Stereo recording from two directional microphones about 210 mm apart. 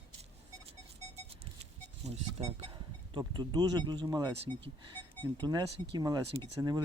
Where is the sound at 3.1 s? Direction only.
20° right (ahead or behind).